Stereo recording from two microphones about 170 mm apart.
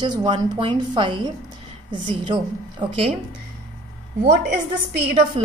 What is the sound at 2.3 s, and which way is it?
Speech, 30° right (ahead or behind).